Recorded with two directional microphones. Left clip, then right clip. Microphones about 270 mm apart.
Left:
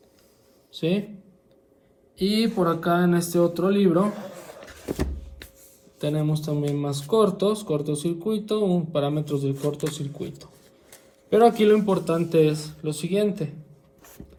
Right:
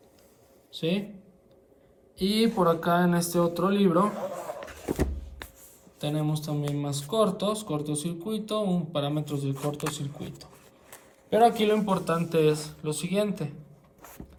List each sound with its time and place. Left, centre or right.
0.8 s speech: centre
2.1 s speech: centre
4.1 s a sound: right
6.0 s a man's voice: centre
9.6 s speech: right
9.9 s a man's voice: centre